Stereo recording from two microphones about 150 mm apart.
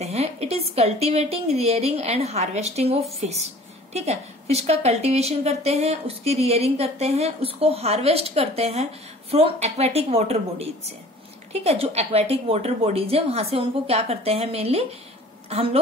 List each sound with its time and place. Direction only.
0.0 s a woman's voice: 45° right (ahead or behind)